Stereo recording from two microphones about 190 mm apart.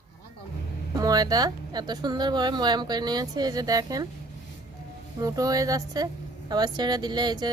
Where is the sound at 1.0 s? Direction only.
20° right (ahead or behind).